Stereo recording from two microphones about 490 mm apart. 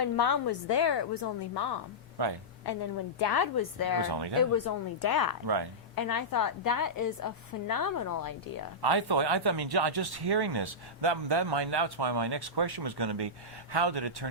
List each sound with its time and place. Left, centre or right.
0.0 s a woman's voice: left
2.2 s speech: right
2.6 s a woman's voice: left
4.1 s speech: right
4.5 s a woman's voice: left
8.8 s speech: right